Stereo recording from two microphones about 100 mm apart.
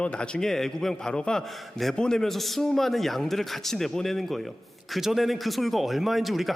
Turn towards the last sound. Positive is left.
turn(degrees=0)  # may be behind; listen again after turning